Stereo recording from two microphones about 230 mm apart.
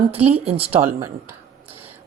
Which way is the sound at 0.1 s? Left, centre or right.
Right.